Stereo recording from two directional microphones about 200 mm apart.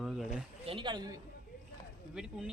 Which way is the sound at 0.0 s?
Centre (ahead or behind).